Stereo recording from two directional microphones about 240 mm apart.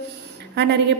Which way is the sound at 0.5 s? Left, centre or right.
Right.